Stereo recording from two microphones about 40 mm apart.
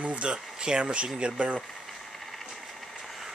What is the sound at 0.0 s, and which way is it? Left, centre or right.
Speech, right.